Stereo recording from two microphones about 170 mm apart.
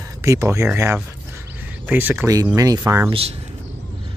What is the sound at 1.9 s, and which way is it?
Speech, 10° right (ahead or behind).